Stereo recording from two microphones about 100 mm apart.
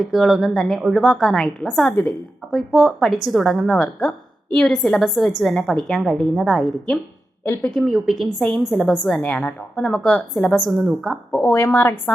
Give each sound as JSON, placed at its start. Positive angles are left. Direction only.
{"t": 0.0, "sound": "a woman's voice", "side_deg": 0}
{"t": 7.7, "sound": "a woman's voice", "side_deg": 0}
{"t": 9.2, "sound": "a woman's voice", "side_deg": 15}
{"t": 11.7, "sound": "a woman's voice", "side_deg": 20}